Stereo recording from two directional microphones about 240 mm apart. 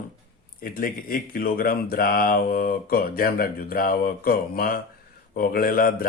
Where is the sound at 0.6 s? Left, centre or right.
Left.